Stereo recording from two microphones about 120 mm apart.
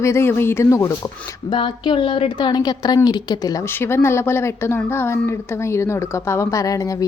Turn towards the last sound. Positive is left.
turn(degrees=30)  # may be behind; listen again after turning